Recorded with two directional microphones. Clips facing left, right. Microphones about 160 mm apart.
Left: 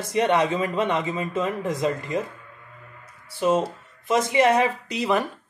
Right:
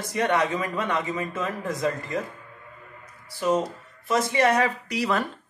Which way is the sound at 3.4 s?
25° left (ahead or behind).